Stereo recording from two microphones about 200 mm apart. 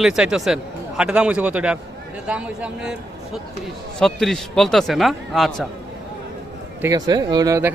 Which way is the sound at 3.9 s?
5° left (ahead or behind).